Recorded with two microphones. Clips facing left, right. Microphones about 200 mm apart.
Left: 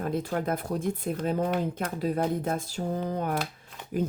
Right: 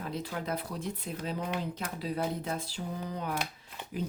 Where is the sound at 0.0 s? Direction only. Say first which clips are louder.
Left 7 dB; 50° left (ahead or behind).